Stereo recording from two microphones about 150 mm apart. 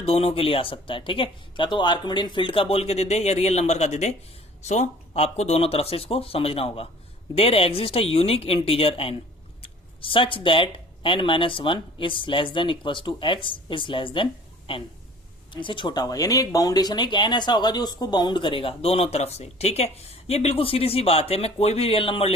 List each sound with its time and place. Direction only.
0.0 s speech: 40° left (ahead or behind)